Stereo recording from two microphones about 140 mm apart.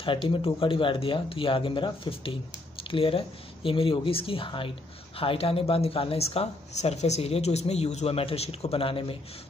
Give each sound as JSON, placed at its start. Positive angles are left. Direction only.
{"t": 0.0, "sound": "speech", "side_deg": 40}